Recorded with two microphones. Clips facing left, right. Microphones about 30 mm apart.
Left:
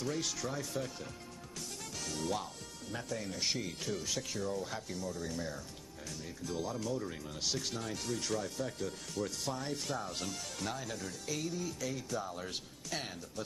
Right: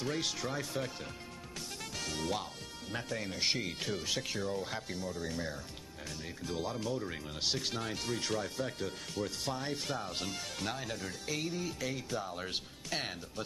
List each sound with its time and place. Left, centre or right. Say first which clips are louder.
0.0 s speech: right 1 dB; right
2.0 s speech: right 1 dB; right